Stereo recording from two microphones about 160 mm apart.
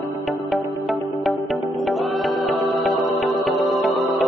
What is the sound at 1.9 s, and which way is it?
Music, centre (ahead or behind).